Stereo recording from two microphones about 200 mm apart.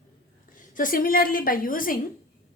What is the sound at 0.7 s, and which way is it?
A woman's voice, 45° left (ahead or behind).